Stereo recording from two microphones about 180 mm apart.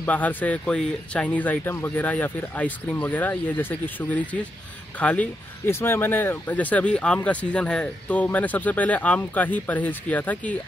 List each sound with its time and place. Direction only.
0.0 s speech: 10° left (ahead or behind)